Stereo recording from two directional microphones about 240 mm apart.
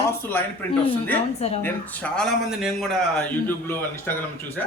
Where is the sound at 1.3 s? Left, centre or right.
Left.